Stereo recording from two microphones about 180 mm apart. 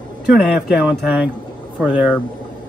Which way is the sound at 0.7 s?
5° right (ahead or behind).